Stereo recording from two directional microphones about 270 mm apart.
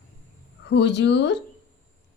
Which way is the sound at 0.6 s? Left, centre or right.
Left.